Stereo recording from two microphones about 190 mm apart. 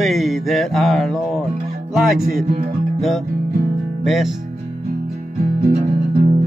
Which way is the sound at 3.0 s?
Centre (ahead or behind).